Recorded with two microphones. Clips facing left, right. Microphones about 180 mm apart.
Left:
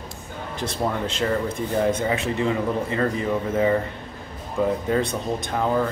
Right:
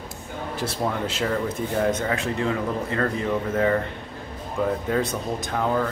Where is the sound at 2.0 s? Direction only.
10° left (ahead or behind).